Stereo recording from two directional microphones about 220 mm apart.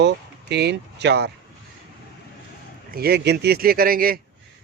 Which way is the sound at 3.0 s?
45° right (ahead or behind).